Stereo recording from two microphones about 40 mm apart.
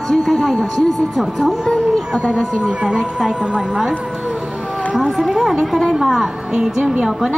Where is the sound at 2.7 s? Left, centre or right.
Right.